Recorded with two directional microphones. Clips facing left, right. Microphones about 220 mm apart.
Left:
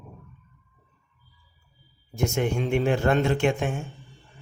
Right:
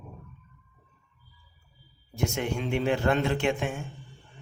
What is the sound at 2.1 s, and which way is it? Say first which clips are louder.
A man's voice: left 4 dB; 45° left (ahead or behind).